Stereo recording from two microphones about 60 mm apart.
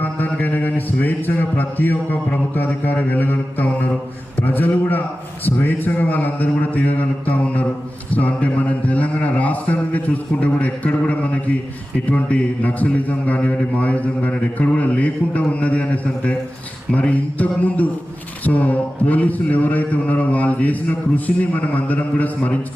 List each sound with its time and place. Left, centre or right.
0.0 s a man's voice: left